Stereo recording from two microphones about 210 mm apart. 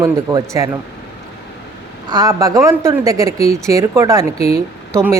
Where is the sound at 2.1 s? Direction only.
15° right (ahead or behind).